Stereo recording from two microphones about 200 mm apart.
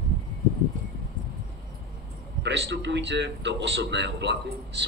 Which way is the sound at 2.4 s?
60° right (ahead or behind).